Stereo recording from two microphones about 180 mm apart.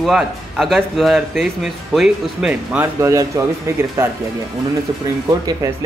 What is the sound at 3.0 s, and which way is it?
Speech, 15° right (ahead or behind).